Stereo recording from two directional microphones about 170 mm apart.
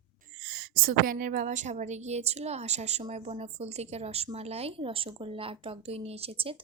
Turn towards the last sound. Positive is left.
turn(degrees=-35)  # may be behind; listen again after turning